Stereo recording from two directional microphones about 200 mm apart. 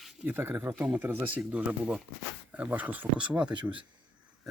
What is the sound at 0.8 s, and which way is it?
Speech, 10° right (ahead or behind).